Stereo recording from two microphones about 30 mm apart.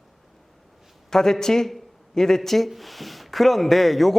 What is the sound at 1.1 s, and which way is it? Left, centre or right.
A man's voice, centre.